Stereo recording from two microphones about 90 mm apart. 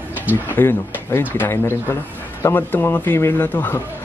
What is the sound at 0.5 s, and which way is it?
Speech, 25° left (ahead or behind).